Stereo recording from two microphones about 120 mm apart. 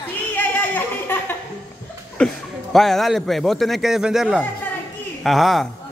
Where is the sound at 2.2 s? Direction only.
Centre (ahead or behind).